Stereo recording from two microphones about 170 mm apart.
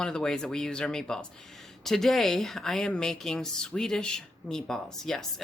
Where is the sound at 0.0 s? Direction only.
5° left (ahead or behind).